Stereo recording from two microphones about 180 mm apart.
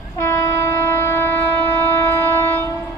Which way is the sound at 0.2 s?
15° left (ahead or behind).